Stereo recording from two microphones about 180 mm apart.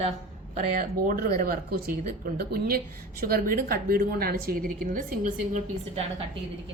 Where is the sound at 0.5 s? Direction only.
50° right (ahead or behind).